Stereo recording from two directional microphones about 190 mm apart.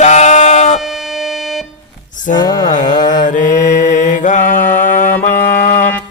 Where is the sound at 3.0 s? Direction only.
45° left (ahead or behind).